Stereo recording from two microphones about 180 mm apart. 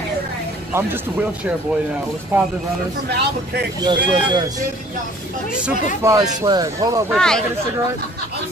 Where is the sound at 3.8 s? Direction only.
25° right (ahead or behind).